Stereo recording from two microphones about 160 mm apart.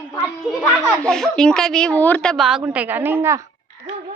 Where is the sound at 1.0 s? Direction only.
5° left (ahead or behind); by 3.4 s 15° right (ahead or behind).